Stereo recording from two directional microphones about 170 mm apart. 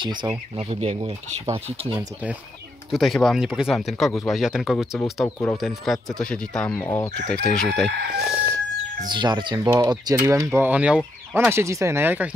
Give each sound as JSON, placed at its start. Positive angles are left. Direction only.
{"t": 0.0, "sound": "speech", "side_deg": -25}
{"t": 0.6, "sound": "speech", "side_deg": -35}
{"t": 2.9, "sound": "speech", "side_deg": 0}
{"t": 9.1, "sound": "speech", "side_deg": -25}